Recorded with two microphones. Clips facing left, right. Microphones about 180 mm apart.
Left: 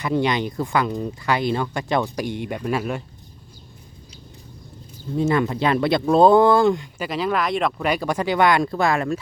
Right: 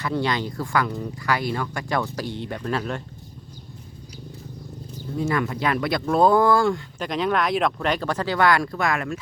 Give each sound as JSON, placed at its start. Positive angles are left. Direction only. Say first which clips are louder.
{"t": 0.0, "sound": "speech", "louder": "left 3 dB", "side_deg": 15}
{"t": 5.1, "sound": "speech", "louder": "left 4 dB", "side_deg": 25}
{"t": 7.0, "sound": "speech", "louder": "right 1 dB", "side_deg": 5}